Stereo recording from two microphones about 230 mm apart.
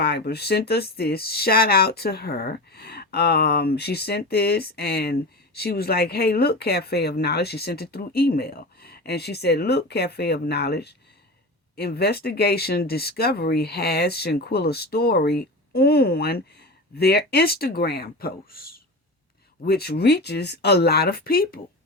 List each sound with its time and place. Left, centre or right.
0.0 s speech: left